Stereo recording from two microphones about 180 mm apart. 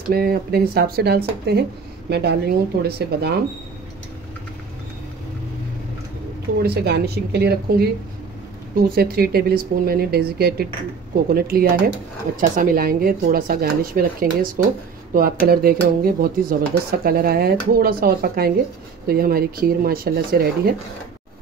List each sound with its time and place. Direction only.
0.1 s speech: 55° right (ahead or behind)
6.6 s speech: 65° right (ahead or behind)